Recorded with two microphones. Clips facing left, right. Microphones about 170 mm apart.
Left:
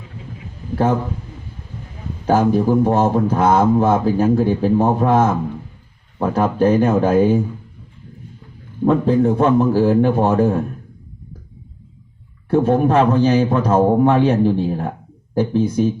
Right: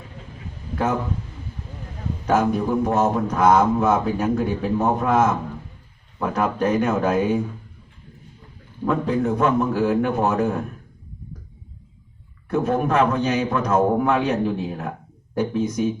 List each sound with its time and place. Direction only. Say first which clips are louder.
2.2 s a man's voice: left 5 dB; 30° left (ahead or behind)
8.8 s speech: left 7 dB; 30° left (ahead or behind)
12.5 s a man's voice: left 6 dB; 30° left (ahead or behind)